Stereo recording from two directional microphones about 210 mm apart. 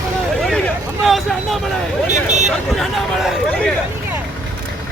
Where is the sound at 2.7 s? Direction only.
Centre (ahead or behind).